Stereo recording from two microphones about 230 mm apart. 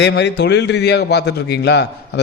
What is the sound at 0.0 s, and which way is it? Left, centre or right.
A man's voice, left.